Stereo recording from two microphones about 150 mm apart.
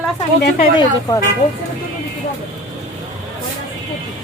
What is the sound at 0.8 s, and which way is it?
Speech, 25° left (ahead or behind).